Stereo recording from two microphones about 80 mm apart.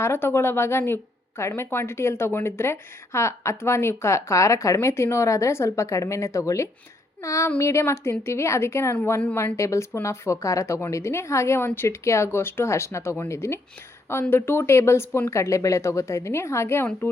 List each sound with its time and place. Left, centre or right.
0.0 s a woman's voice: left